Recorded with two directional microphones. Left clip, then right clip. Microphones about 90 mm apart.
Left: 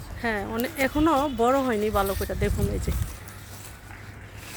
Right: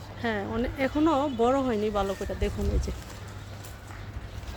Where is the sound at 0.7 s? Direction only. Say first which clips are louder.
Left 3 dB; 50° left (ahead or behind); by 2.1 s 70° left (ahead or behind).